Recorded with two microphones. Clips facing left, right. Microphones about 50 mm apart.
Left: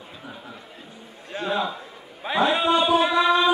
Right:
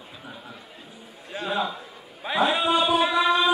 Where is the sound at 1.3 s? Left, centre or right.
Centre.